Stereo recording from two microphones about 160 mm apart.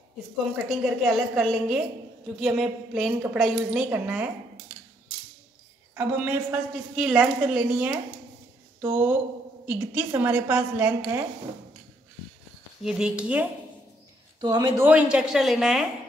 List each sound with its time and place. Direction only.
0.7 s a woman's voice: 5° right (ahead or behind)
5.9 s a woman's voice: 10° right (ahead or behind)
12.8 s a woman's voice: 5° right (ahead or behind)
14.4 s speech: 30° right (ahead or behind)
14.8 s a woman's voice: 10° right (ahead or behind)